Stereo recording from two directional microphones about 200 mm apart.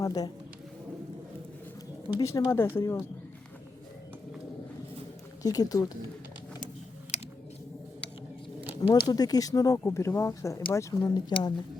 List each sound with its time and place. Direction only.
0.0 s speech: 20° left (ahead or behind)
2.1 s speech: 15° left (ahead or behind)
5.4 s speech: 20° left (ahead or behind)
9.0 s speech: 20° left (ahead or behind)